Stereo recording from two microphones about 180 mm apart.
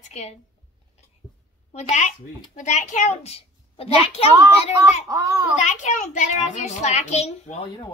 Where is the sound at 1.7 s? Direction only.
40° left (ahead or behind).